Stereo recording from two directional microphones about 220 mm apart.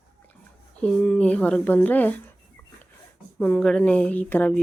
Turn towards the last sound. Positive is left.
turn(degrees=10)  # may be behind; listen again after turning